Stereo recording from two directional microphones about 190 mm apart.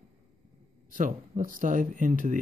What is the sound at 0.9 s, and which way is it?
Speech, 45° right (ahead or behind).